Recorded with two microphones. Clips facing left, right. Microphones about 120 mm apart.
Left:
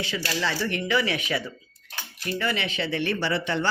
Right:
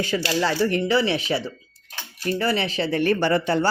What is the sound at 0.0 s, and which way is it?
Speech, 45° right (ahead or behind).